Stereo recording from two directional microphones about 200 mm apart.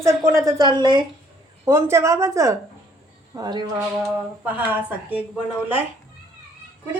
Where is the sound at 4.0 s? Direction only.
10° right (ahead or behind).